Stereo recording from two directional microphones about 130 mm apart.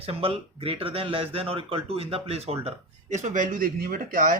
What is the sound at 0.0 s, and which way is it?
Speech, 45° right (ahead or behind).